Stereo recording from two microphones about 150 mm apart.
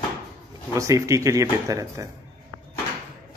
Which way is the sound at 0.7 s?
20° right (ahead or behind).